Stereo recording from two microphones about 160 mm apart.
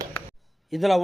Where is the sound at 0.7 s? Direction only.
Centre (ahead or behind).